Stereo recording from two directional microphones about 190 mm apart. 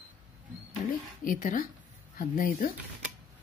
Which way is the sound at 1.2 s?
45° left (ahead or behind).